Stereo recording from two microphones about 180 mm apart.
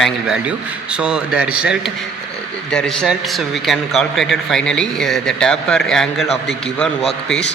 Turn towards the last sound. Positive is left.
turn(degrees=5)  # may be behind; listen again after turning